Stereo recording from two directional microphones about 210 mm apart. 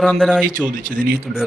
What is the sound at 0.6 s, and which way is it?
Speech, 40° right (ahead or behind).